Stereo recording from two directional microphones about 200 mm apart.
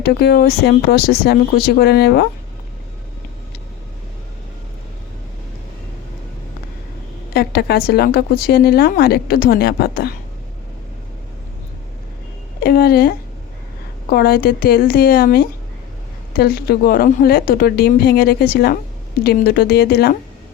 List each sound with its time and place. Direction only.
0.0 s a woman's voice: 50° left (ahead or behind)
7.3 s a woman's voice: 50° left (ahead or behind)
12.5 s a woman's voice: 50° left (ahead or behind)